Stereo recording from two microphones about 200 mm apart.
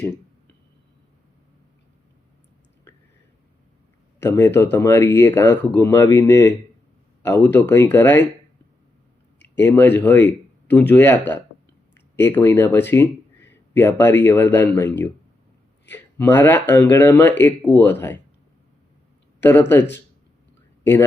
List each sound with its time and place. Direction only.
4.2 s speech: 15° left (ahead or behind)
9.6 s speech: 10° left (ahead or behind)
15.9 s speech: 10° left (ahead or behind)
19.4 s speech: 10° left (ahead or behind)